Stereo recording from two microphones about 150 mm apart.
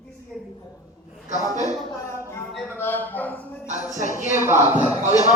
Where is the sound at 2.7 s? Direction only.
15° left (ahead or behind).